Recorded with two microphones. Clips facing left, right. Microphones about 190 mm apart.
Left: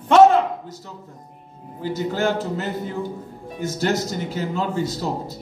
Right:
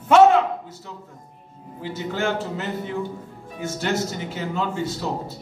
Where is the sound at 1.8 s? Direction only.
40° left (ahead or behind).